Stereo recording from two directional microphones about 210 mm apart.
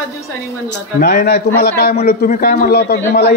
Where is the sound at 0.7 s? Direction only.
45° left (ahead or behind).